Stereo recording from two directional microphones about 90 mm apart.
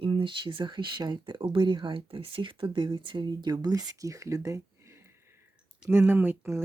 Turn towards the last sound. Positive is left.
turn(degrees=-25)  # may be behind; listen again after turning